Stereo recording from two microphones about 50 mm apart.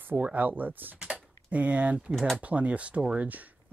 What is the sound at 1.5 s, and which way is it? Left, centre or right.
Speech, right.